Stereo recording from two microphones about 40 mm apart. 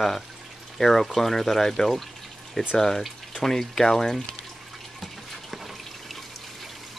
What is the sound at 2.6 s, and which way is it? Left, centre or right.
Speech, left.